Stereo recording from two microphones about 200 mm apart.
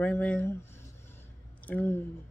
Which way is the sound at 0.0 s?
5° left (ahead or behind).